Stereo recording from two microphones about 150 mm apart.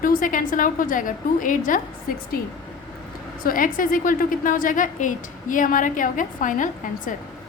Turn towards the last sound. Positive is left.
turn(degrees=60)  # may be behind; listen again after turning